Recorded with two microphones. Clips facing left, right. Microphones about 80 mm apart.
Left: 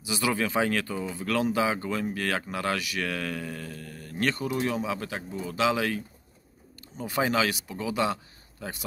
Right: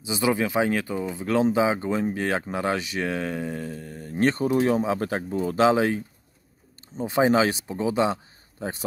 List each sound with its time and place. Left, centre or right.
0.0 s speech: right